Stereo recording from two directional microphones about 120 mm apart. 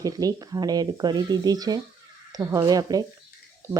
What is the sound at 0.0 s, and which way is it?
Speech, 30° right (ahead or behind).